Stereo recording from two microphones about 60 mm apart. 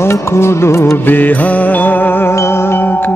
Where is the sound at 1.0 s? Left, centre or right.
Left.